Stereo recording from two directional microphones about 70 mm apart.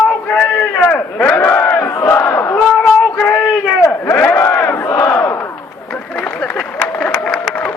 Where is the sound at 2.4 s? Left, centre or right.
Left.